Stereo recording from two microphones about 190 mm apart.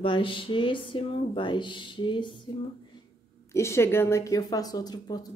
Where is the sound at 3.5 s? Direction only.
15° left (ahead or behind).